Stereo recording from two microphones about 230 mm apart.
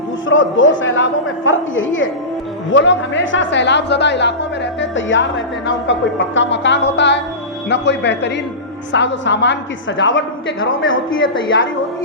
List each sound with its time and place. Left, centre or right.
0.3 s a man's voice: left